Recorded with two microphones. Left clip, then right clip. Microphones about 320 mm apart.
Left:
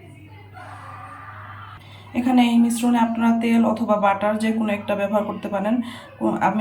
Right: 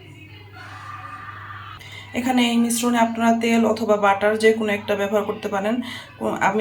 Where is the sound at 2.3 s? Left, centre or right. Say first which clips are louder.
Left 3 dB; centre.